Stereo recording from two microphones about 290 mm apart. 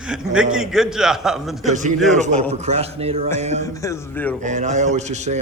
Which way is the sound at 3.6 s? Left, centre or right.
Centre.